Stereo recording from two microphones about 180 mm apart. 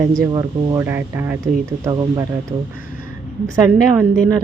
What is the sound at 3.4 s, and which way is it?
Speech, 10° right (ahead or behind).